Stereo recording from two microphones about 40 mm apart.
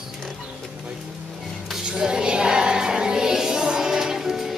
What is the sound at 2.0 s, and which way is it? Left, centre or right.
Music, centre.